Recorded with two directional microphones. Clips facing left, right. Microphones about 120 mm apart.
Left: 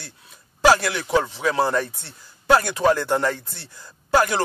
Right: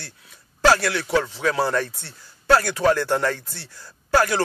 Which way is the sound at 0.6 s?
15° left (ahead or behind).